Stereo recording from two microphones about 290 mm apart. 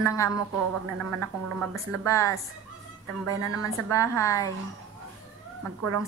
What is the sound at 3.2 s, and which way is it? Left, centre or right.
Speech, right.